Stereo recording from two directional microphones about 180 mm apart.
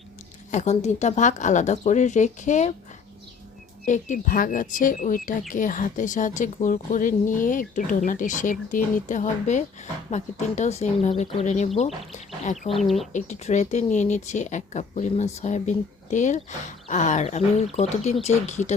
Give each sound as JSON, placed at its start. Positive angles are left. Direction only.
{"t": 0.5, "sound": "speech", "side_deg": 40}
{"t": 3.8, "sound": "speech", "side_deg": 45}
{"t": 12.7, "sound": "speech", "side_deg": 0}
{"t": 13.1, "sound": "speech", "side_deg": 40}